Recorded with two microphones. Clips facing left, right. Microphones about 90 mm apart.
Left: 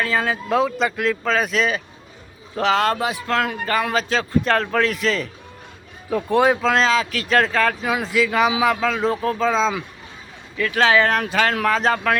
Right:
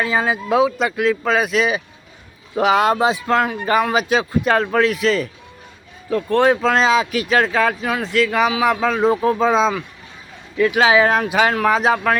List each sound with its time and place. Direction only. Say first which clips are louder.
0.0 s speech: right 2 dB; 15° right (ahead or behind)
6.1 s speech: right 2 dB; 10° left (ahead or behind)
6.9 s speech: right 4 dB; 15° right (ahead or behind)
7.3 s speech: left 1 dB; 5° right (ahead or behind)
7.9 s speech: right 1 dB; 5° left (ahead or behind); by 9.7 s 10° right (ahead or behind)
10.8 s speech: right 1 dB; 10° right (ahead or behind)